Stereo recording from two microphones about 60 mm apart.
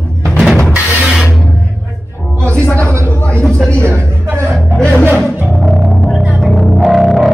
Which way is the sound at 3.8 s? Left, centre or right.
Right.